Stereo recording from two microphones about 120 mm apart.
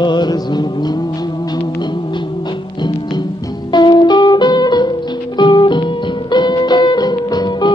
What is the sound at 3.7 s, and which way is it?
Music, 40° left (ahead or behind).